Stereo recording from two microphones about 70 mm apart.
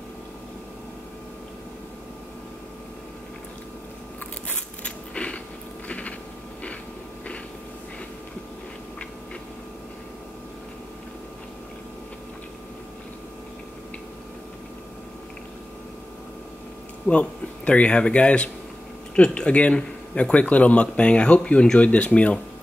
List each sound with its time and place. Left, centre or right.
4.8 s biting: centre
5.9 s a sound: centre
17.1 s speech: centre